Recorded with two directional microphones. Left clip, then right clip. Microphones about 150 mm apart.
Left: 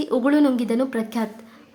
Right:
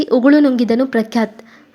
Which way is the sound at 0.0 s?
30° right (ahead or behind).